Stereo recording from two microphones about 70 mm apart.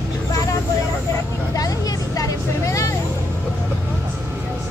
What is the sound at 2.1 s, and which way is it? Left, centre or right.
Vehicle, left.